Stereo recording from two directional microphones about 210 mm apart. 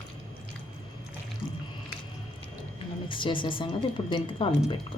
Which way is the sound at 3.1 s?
25° left (ahead or behind).